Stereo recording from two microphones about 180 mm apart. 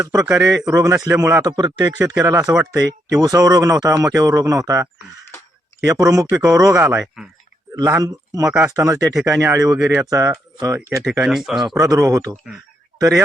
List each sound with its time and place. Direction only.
0.0 s speech: 20° right (ahead or behind)
11.2 s speech: centre (ahead or behind)
11.7 s speech: 20° right (ahead or behind)